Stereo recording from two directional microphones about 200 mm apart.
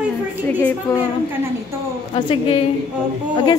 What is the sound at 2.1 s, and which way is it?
Speech, 30° left (ahead or behind).